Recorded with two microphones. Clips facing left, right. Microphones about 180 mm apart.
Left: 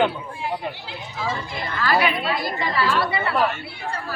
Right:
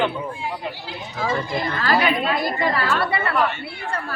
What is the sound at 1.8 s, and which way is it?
Speech, 50° right (ahead or behind).